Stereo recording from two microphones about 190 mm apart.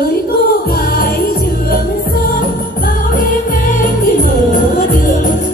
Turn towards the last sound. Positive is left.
turn(degrees=45)  # may be behind; listen again after turning